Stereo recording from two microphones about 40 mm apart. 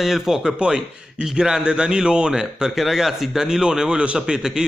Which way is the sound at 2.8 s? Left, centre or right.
Centre.